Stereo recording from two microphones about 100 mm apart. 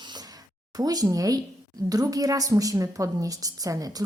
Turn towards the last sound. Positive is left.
turn(degrees=-35)  # may be behind; listen again after turning